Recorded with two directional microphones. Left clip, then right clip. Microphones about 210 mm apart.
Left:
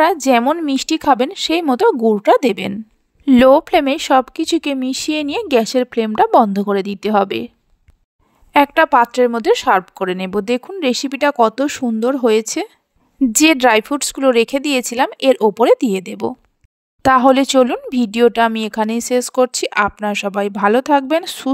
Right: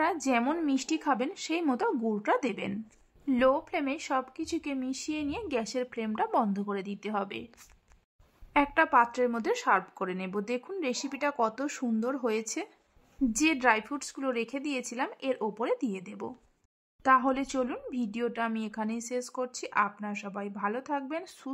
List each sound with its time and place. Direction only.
0.0 s speech: 40° left (ahead or behind)
8.5 s speech: 40° left (ahead or behind)